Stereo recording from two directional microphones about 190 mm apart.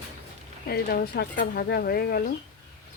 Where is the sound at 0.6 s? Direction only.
55° left (ahead or behind).